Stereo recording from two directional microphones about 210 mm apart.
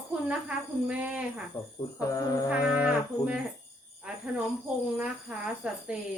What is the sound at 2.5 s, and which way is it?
Speech, 5° right (ahead or behind).